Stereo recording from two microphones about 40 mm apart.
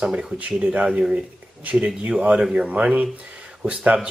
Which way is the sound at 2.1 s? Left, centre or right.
Right.